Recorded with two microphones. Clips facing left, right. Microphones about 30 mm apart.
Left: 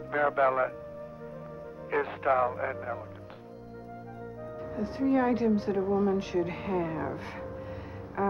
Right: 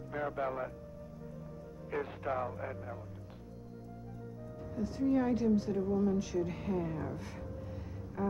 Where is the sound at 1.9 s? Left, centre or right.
Left.